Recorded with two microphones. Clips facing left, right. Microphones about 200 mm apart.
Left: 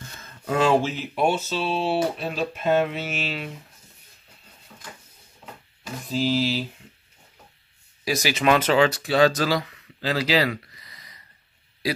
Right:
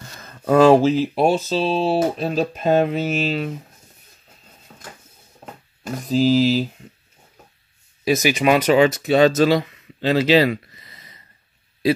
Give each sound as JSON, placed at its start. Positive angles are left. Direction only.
{"t": 0.2, "sound": "speech", "side_deg": -40}
{"t": 6.0, "sound": "mantra", "side_deg": -40}
{"t": 8.0, "sound": "speech", "side_deg": -20}